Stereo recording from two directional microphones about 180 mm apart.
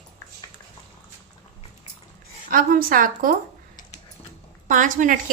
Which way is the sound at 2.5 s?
50° right (ahead or behind).